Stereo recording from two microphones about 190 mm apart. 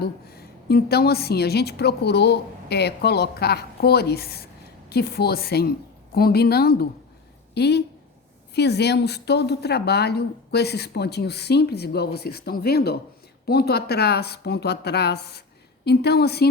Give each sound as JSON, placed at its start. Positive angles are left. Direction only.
{"t": 0.0, "sound": "a woman's voice", "side_deg": 55}